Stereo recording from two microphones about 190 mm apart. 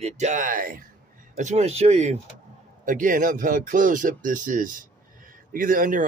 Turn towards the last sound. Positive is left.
turn(degrees=-45)  # may be behind; listen again after turning